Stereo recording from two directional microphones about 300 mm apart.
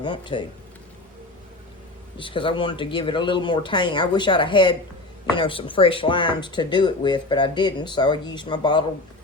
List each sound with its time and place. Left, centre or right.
0.0 s speech: centre
2.1 s speech: centre